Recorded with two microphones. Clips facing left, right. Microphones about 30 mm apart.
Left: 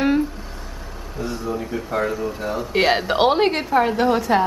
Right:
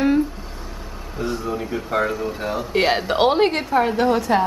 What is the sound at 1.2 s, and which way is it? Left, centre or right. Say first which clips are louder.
Speech: right 1 dB; centre.